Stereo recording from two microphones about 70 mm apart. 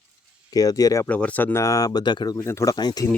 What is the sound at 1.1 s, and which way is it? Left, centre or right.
Speech, left.